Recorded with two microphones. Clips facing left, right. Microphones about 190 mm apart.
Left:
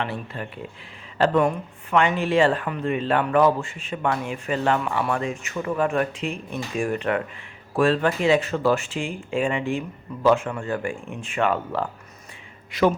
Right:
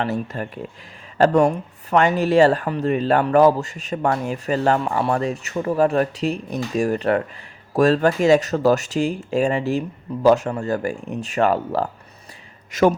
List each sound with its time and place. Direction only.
0.0 s speech: 45° right (ahead or behind)